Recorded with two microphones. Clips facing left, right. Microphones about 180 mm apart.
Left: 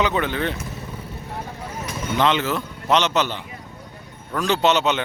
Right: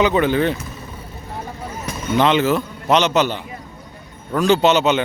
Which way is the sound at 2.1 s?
5° right (ahead or behind).